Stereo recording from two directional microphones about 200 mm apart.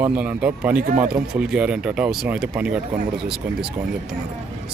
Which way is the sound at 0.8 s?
45° right (ahead or behind).